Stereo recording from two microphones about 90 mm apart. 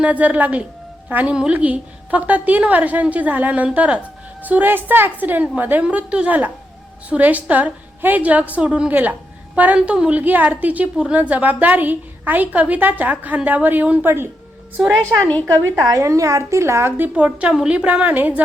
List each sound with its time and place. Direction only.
0.0 s a woman's voice: 15° right (ahead or behind)
15.2 s a woman's voice: 15° left (ahead or behind)
15.9 s a woman's voice: 35° right (ahead or behind)
17.2 s a woman's voice: 10° right (ahead or behind)